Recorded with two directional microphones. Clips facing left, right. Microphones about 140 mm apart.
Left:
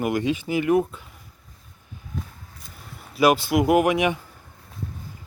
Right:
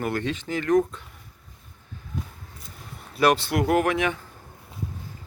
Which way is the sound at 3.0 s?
5° left (ahead or behind).